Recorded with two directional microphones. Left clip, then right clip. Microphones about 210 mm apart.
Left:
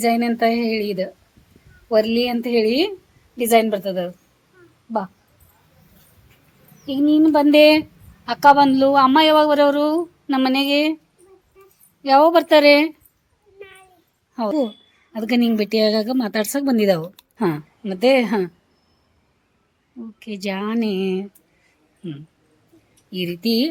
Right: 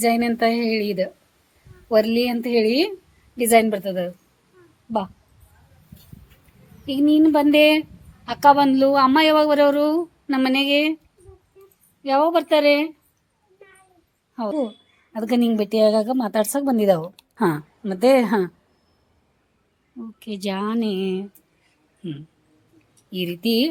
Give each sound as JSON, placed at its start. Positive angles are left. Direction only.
{"t": 0.0, "sound": "a sound", "side_deg": -10}
{"t": 1.9, "sound": "a woman's voice", "side_deg": -5}
{"t": 6.8, "sound": "a woman's voice", "side_deg": 0}
{"t": 12.0, "sound": "a woman's voice", "side_deg": 15}
{"t": 14.3, "sound": "a woman's voice", "side_deg": 10}
{"t": 15.1, "sound": "a woman's voice", "side_deg": 0}
{"t": 20.0, "sound": "a woman's voice", "side_deg": -5}
{"t": 23.1, "sound": "a sound", "side_deg": -10}